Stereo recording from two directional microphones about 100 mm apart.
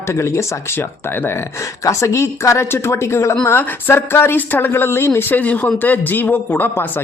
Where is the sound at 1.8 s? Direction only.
30° left (ahead or behind).